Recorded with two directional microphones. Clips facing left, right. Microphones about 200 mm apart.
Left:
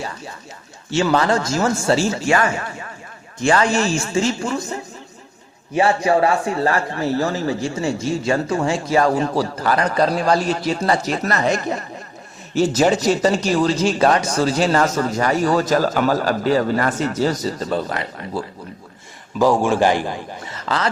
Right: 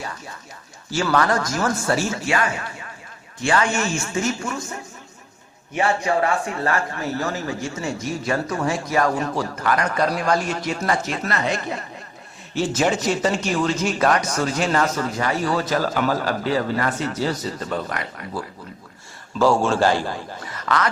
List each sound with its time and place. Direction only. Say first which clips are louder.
0.9 s speech: left 3 dB; 25° left (ahead or behind)
3.4 s speech: left 4 dB; 40° left (ahead or behind)
6.1 s speech: left 4 dB; 30° left (ahead or behind)
19.4 s a man's voice: left 2 dB; 15° left (ahead or behind)